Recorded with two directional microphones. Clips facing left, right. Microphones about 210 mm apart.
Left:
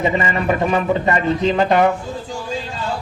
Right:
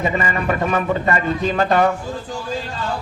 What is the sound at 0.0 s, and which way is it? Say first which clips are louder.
A man's voice: left 2 dB; 20° left (ahead or behind).